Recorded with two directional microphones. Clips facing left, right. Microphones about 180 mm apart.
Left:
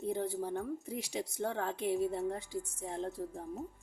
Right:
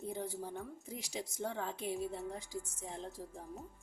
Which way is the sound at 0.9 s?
60° left (ahead or behind).